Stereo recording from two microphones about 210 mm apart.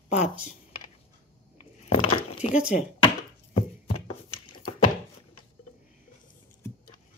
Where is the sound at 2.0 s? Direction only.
30° left (ahead or behind).